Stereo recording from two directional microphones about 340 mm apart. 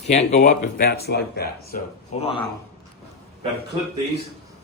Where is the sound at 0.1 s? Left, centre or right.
Centre.